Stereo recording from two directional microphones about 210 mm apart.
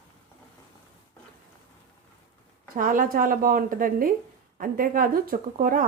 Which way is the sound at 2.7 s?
40° right (ahead or behind).